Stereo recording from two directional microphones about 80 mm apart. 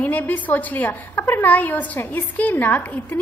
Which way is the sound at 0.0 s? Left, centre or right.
Left.